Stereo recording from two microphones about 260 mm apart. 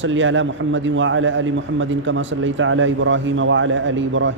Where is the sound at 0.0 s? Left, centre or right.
Right.